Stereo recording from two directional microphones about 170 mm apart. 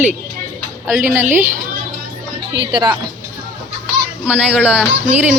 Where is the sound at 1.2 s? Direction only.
50° right (ahead or behind).